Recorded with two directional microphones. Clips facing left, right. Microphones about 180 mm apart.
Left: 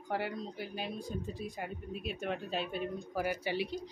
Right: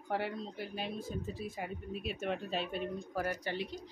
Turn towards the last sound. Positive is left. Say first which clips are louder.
# left 3 dB
turn(degrees=10)  # may be behind; listen again after turning